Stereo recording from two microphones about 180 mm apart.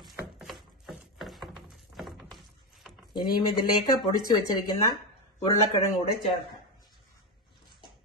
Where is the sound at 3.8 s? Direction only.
25° left (ahead or behind).